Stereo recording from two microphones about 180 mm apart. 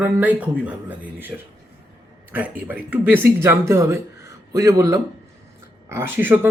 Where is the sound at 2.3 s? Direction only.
10° right (ahead or behind).